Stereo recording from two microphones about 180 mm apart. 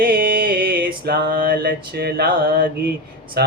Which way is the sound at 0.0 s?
55° right (ahead or behind).